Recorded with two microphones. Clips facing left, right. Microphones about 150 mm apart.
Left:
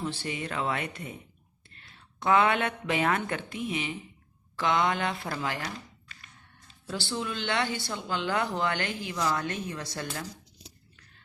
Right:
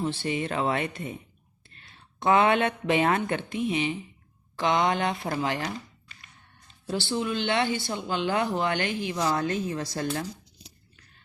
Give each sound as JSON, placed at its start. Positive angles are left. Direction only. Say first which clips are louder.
{"t": 0.0, "sound": "speech", "louder": "right 5 dB", "side_deg": -20}
{"t": 2.1, "sound": "speech", "louder": "right 3 dB", "side_deg": -25}
{"t": 6.8, "sound": "speech", "louder": "right 5 dB", "side_deg": -20}